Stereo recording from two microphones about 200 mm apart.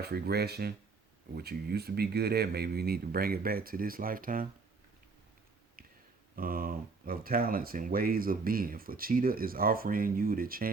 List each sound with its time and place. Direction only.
0.0 s speech: 50° right (ahead or behind)
6.3 s speech: 45° right (ahead or behind)